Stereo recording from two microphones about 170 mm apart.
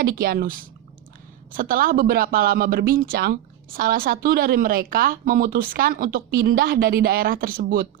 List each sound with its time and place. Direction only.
0.0 s speech: 60° right (ahead or behind)